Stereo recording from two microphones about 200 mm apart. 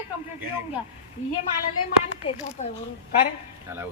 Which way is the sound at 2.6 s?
40° left (ahead or behind).